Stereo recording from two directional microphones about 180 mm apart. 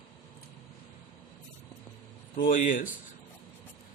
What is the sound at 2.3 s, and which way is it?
Speech, 50° left (ahead or behind).